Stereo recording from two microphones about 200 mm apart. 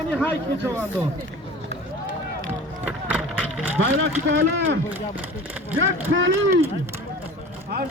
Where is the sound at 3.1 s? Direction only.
10° right (ahead or behind).